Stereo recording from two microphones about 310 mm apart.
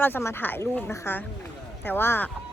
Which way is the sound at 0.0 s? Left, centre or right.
Centre.